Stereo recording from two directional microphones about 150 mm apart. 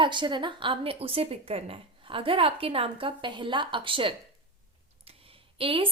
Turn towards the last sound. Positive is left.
turn(degrees=-35)  # may be behind; listen again after turning